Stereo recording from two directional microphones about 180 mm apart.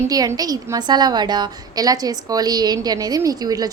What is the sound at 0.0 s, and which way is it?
A woman's voice, 20° right (ahead or behind).